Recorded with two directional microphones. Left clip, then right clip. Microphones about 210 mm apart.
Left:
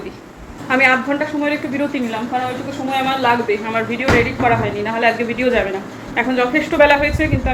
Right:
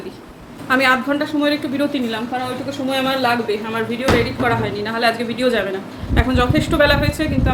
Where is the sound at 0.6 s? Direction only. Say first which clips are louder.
Left 1 dB; 15° right (ahead or behind).